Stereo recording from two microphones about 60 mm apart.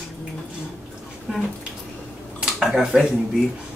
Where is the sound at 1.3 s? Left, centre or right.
Centre.